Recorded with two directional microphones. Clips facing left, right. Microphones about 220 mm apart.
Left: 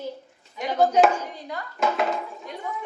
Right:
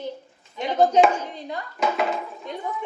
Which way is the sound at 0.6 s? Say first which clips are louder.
Right 2 dB; 25° right (ahead or behind).